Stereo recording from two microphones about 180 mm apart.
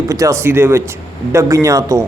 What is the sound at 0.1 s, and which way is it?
A man's voice, 15° right (ahead or behind).